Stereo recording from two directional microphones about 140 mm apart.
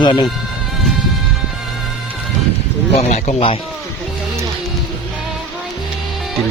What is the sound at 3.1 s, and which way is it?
Speech, 50° left (ahead or behind).